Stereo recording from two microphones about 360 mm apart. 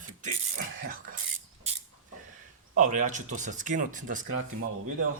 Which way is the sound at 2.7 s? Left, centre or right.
Right.